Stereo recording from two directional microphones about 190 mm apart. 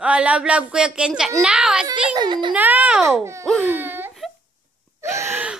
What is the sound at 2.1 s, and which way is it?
Speech, 25° right (ahead or behind).